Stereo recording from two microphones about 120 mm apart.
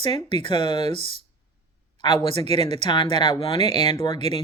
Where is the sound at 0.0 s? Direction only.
45° left (ahead or behind).